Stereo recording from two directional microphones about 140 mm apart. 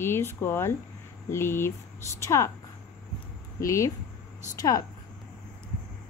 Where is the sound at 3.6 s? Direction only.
20° left (ahead or behind).